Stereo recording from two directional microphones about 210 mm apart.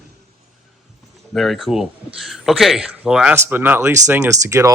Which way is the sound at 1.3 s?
Centre (ahead or behind).